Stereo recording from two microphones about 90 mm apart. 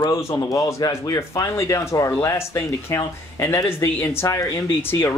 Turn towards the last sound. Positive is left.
turn(degrees=30)  # may be behind; listen again after turning